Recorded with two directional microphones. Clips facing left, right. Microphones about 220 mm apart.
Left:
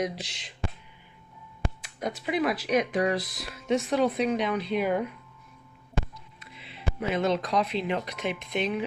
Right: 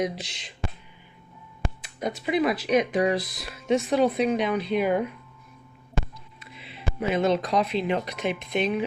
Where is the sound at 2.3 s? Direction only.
10° left (ahead or behind).